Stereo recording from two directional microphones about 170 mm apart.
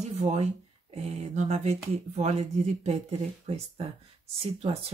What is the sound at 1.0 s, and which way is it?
Speech, 40° right (ahead or behind).